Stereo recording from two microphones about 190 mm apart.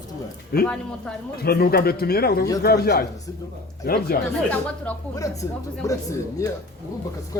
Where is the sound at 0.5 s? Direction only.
55° left (ahead or behind).